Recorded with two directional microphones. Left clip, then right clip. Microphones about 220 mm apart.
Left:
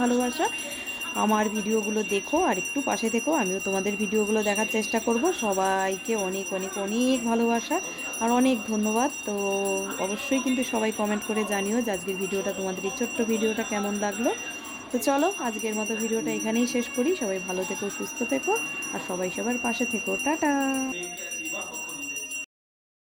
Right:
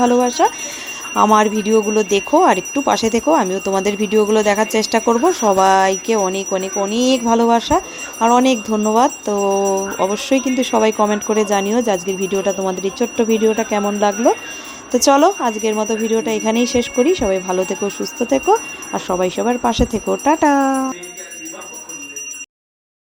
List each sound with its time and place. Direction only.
0.0 s speech: 15° right (ahead or behind)